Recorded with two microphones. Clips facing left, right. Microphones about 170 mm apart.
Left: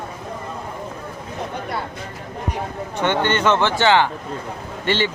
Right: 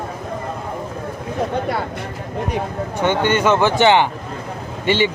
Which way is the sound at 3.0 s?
10° right (ahead or behind).